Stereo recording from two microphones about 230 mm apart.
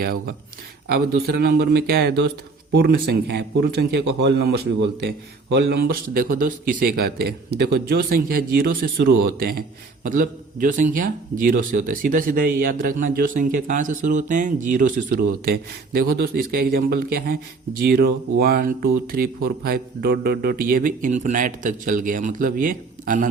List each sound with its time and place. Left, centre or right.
0.9 s a man's voice: right